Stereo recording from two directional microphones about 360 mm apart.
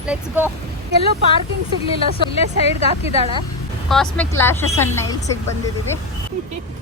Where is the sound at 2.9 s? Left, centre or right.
Centre.